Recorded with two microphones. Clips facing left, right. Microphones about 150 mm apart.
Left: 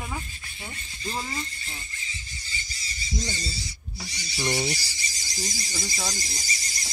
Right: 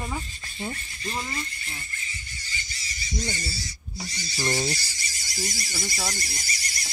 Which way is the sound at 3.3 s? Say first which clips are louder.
Right 1 dB; 20° left (ahead or behind).